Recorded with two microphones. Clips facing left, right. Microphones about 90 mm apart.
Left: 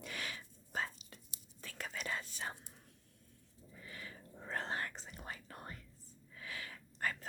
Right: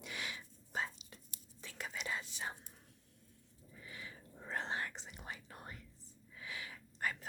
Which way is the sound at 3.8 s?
20° right (ahead or behind).